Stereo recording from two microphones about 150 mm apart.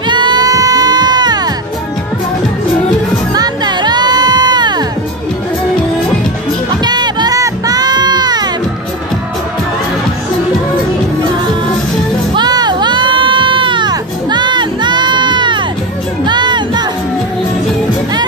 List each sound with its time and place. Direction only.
0.1 s music: 30° right (ahead or behind)
3.3 s music: 30° right (ahead or behind)
6.8 s music: 30° right (ahead or behind)
12.4 s music: 25° right (ahead or behind)